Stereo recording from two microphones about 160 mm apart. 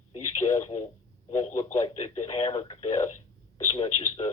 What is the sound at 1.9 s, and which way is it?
Speech, 40° left (ahead or behind).